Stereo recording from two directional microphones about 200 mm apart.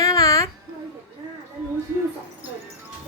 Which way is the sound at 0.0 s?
15° left (ahead or behind).